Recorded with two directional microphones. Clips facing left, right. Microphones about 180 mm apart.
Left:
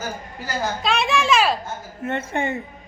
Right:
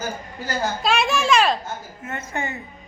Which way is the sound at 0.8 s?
Centre (ahead or behind).